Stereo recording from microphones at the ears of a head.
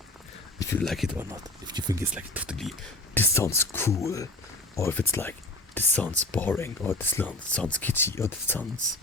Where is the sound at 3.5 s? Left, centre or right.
Left.